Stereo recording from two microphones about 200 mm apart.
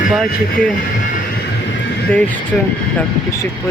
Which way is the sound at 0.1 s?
Centre (ahead or behind).